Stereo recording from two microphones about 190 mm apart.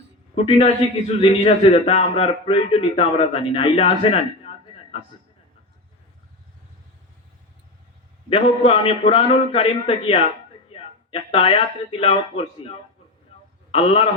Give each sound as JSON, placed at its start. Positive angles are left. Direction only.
{"t": 0.3, "sound": "a man's voice", "side_deg": 30}
{"t": 8.3, "sound": "a man's voice", "side_deg": 30}